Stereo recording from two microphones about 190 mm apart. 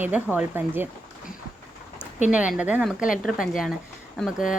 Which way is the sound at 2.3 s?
5° right (ahead or behind).